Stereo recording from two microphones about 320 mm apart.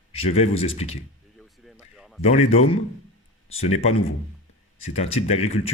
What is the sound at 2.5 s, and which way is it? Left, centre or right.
Speech, centre.